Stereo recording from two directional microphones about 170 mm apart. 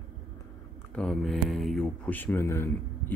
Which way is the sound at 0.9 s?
5° left (ahead or behind).